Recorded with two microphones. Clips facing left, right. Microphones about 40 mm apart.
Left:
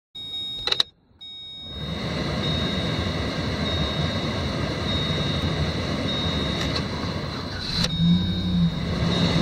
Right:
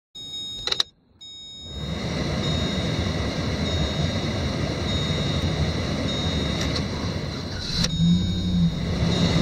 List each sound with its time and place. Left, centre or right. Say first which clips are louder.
0.7 s vehicle: left 1 dB; centre